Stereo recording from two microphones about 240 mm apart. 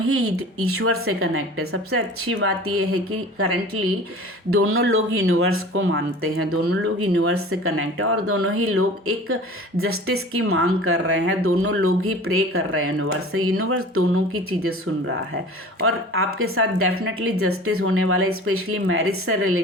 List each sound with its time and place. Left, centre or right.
0.0 s speech: right
6.5 s speech: right
16.1 s speech: right